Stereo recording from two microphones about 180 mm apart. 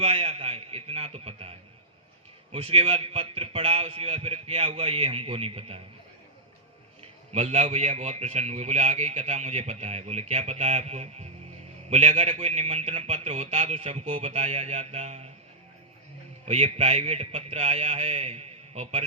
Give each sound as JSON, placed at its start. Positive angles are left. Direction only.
{"t": 0.0, "sound": "a sound", "side_deg": -35}
{"t": 2.5, "sound": "a man's voice", "side_deg": -30}
{"t": 7.3, "sound": "a man's voice", "side_deg": -35}
{"t": 16.5, "sound": "a man's voice", "side_deg": -35}